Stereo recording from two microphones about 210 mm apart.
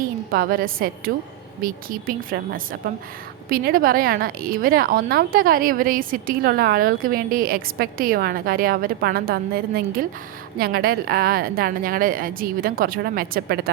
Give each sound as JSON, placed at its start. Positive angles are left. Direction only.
{"t": 0.3, "sound": "a woman's voice", "side_deg": -45}